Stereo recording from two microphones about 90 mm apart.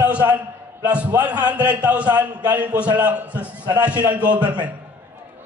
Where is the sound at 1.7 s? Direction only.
15° right (ahead or behind).